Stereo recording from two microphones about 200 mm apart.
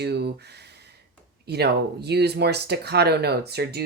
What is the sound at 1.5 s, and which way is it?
Speech, 55° right (ahead or behind).